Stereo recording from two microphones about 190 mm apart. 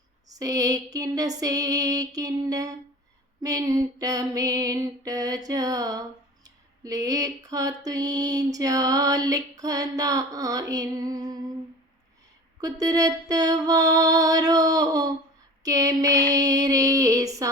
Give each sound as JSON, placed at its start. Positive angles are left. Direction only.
{"t": 0.3, "sound": "speech", "side_deg": -20}
{"t": 12.8, "sound": "speech", "side_deg": -20}
{"t": 15.6, "sound": "a sound", "side_deg": -20}